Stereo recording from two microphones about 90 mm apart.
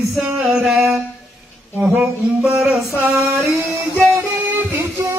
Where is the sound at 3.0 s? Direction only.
20° right (ahead or behind).